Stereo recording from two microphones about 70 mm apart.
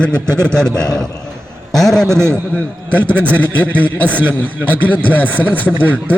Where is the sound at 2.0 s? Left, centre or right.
Right.